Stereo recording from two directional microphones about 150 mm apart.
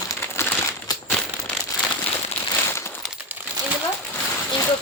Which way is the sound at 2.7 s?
15° left (ahead or behind).